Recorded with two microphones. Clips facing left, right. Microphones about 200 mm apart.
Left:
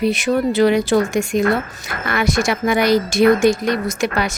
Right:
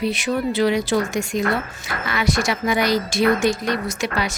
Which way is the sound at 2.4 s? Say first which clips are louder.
Left 4 dB; 55° left (ahead or behind).